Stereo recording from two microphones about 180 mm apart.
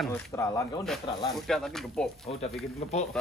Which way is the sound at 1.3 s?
Centre (ahead or behind).